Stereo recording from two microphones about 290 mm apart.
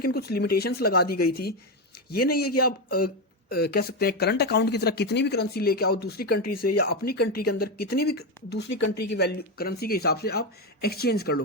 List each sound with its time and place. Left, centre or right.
0.0 s speech: left
6.4 s speech: left
6.7 s speech: left
8.7 s speech: left
9.1 s speech: left